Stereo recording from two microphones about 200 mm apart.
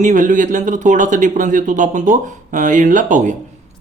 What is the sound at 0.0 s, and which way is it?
Speech, 40° right (ahead or behind).